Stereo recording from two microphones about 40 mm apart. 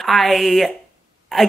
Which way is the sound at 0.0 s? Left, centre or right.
Centre.